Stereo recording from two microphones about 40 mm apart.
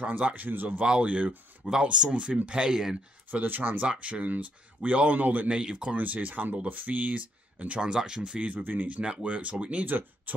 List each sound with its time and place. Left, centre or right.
0.0 s speech: right
0.3 s speech: right
1.0 s speech: right
1.6 s speech: right
3.3 s speech: right
4.0 s speech: right
5.5 s speech: right
5.9 s speech: right
7.8 s speech: centre
8.4 s speech: right
9.8 s speech: right